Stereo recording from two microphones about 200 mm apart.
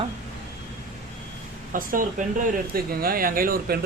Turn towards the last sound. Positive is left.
turn(degrees=-45)  # may be behind; listen again after turning